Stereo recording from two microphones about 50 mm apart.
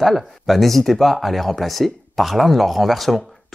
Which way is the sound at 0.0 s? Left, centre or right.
Centre.